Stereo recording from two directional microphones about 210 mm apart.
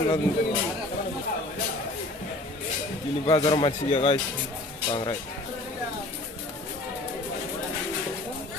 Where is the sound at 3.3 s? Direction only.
25° left (ahead or behind).